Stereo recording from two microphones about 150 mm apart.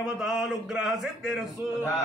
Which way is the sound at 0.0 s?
5° right (ahead or behind).